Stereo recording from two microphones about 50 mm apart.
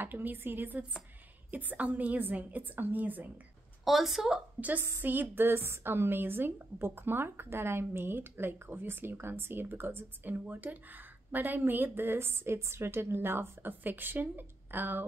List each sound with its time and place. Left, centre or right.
0.0 s a woman's voice: right
3.8 s a woman's voice: centre
4.6 s a woman's voice: right